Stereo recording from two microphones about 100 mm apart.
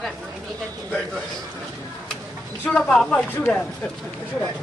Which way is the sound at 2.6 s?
15° left (ahead or behind).